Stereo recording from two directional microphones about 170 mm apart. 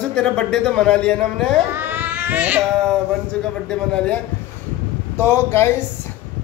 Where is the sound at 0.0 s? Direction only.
5° left (ahead or behind).